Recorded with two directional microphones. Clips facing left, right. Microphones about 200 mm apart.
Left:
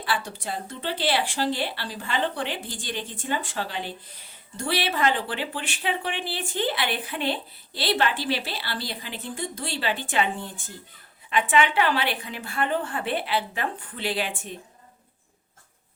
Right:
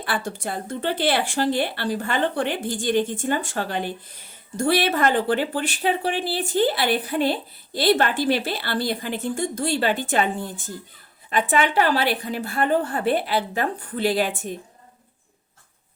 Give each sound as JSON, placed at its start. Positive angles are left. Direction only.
{"t": 0.0, "sound": "a woman's voice", "side_deg": -50}